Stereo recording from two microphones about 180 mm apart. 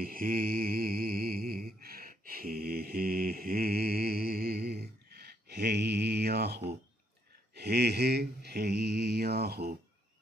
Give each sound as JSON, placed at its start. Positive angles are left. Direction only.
{"t": 0.0, "sound": "mantra", "side_deg": -50}